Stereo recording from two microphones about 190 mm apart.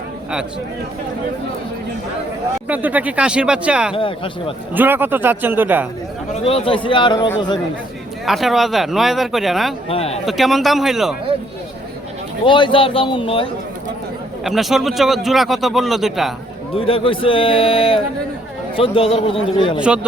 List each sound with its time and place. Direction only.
2.6 s speech: 10° right (ahead or behind)
3.9 s a man's voice: 30° left (ahead or behind)
4.7 s speech: 10° right (ahead or behind)
6.4 s a man's voice: 30° left (ahead or behind)
8.2 s speech: centre (ahead or behind)
9.9 s speech: 30° left (ahead or behind)
10.2 s speech: centre (ahead or behind)
12.5 s a man's voice: 25° left (ahead or behind)
14.4 s speech: centre (ahead or behind)
16.7 s a man's voice: 30° left (ahead or behind)
19.8 s speech: 5° right (ahead or behind)